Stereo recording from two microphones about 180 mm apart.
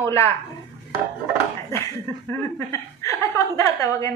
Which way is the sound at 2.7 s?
15° left (ahead or behind).